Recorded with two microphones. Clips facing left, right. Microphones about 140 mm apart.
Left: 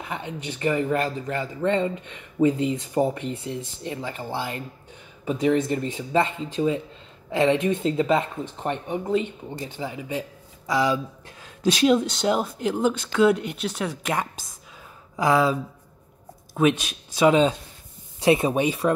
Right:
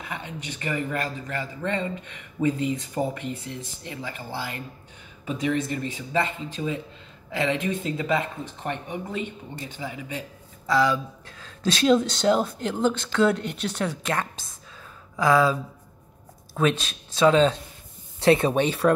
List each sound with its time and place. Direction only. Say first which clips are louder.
0.0 s speech: left 3 dB; 25° left (ahead or behind); by 18.9 s 5° left (ahead or behind)